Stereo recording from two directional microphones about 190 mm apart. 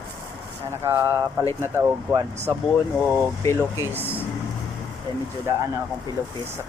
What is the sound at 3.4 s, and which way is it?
Speech, 15° left (ahead or behind).